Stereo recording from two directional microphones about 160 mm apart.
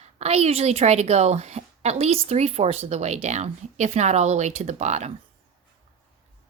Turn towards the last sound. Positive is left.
turn(degrees=-45)  # may be behind; listen again after turning